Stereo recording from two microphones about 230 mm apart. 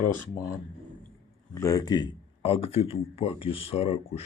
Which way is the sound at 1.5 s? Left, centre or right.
Centre.